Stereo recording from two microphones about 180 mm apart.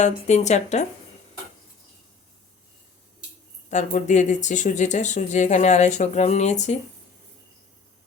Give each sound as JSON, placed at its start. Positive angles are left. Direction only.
{"t": 0.0, "sound": "speech", "side_deg": 40}
{"t": 3.7, "sound": "speech", "side_deg": 45}